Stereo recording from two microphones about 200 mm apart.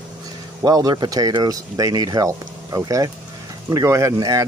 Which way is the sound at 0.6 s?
20° right (ahead or behind).